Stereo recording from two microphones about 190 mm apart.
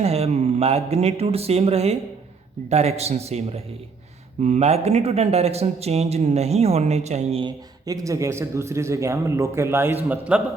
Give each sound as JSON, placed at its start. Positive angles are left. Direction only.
{"t": 0.0, "sound": "speech", "side_deg": -30}